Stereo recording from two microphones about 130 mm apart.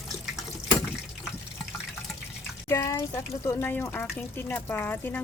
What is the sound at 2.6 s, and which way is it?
Speech, 25° left (ahead or behind).